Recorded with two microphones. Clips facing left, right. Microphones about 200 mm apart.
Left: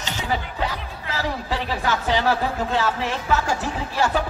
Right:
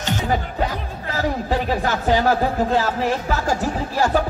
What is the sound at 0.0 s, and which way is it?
Music, 50° right (ahead or behind).